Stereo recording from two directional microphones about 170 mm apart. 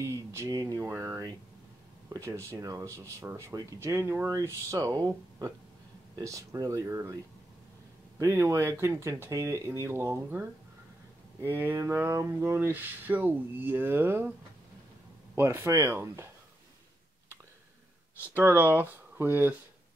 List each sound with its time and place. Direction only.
0.0 s speech: 15° right (ahead or behind)
8.2 s speech: 20° right (ahead or behind)
11.4 s speech: 10° right (ahead or behind)
15.3 s speech: 15° right (ahead or behind)
18.3 s speech: 10° right (ahead or behind)